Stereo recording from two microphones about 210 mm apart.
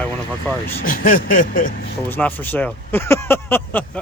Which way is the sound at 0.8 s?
40° left (ahead or behind).